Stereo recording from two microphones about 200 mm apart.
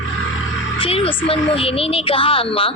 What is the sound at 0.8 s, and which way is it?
A woman's voice, 25° left (ahead or behind).